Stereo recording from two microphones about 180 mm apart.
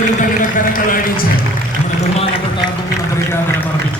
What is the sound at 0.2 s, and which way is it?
Speech, 50° left (ahead or behind).